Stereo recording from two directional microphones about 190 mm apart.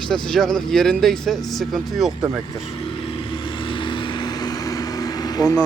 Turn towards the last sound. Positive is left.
turn(degrees=20)  # may be behind; listen again after turning